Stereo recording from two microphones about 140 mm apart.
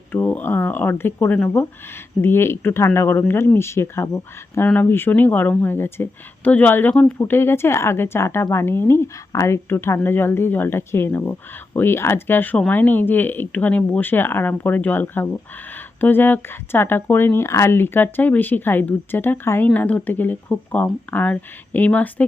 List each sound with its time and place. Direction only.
0.1 s speech: 15° left (ahead or behind)